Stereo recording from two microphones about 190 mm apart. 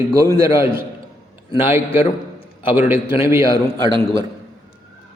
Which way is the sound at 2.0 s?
30° left (ahead or behind).